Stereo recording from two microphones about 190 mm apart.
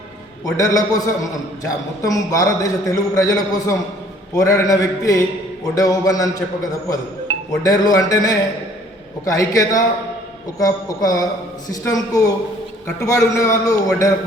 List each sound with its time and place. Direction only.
0.5 s a man's voice: 20° left (ahead or behind)